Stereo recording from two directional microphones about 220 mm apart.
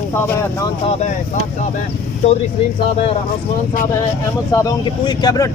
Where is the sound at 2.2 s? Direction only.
30° left (ahead or behind).